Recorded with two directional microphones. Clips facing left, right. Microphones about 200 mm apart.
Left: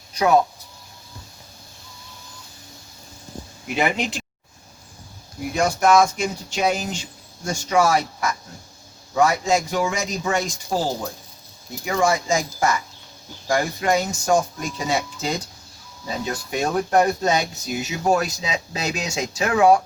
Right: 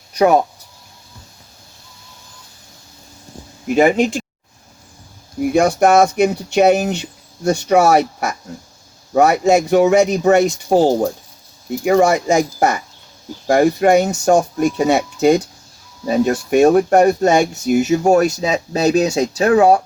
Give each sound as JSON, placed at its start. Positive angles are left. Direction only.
{"t": 3.7, "sound": "speech", "side_deg": -45}
{"t": 5.5, "sound": "speech", "side_deg": -60}